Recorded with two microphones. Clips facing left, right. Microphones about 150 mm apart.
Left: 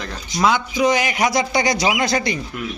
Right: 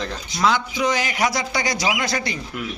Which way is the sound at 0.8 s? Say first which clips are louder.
Left 4 dB; 15° left (ahead or behind).